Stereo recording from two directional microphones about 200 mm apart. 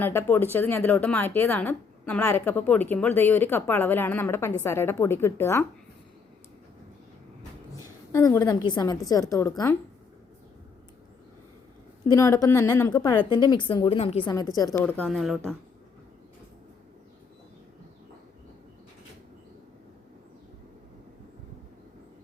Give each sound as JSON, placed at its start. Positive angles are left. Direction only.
{"t": 0.0, "sound": "a woman's voice", "side_deg": 10}
{"t": 8.1, "sound": "a woman's voice", "side_deg": 15}
{"t": 12.0, "sound": "a woman's voice", "side_deg": 15}
{"t": 14.3, "sound": "a woman's voice", "side_deg": 20}
{"t": 14.8, "sound": "speech", "side_deg": 5}